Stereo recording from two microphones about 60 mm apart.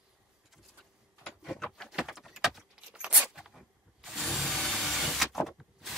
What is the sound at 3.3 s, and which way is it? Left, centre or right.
Zipper, centre.